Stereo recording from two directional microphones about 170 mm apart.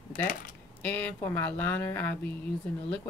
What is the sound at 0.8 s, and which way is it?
Speech, 10° left (ahead or behind).